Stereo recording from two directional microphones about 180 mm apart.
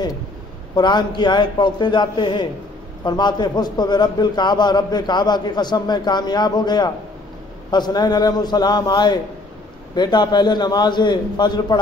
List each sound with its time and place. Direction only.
0.7 s a man's voice: 25° left (ahead or behind)